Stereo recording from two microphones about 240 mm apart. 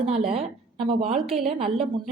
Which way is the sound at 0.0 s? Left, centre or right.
Right.